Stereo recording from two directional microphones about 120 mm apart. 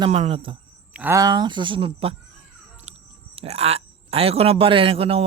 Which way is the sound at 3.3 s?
55° right (ahead or behind).